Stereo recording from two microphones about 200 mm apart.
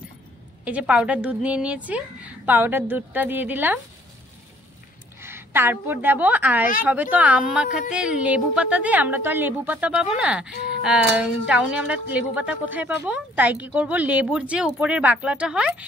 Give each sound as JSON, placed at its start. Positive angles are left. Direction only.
{"t": 0.7, "sound": "a woman's voice", "side_deg": -5}
{"t": 5.2, "sound": "a woman's voice", "side_deg": -10}
{"t": 10.5, "sound": "speech", "side_deg": 55}
{"t": 10.8, "sound": "a woman's voice", "side_deg": -5}